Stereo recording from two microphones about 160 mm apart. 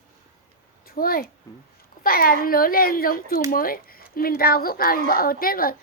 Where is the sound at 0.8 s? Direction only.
70° left (ahead or behind).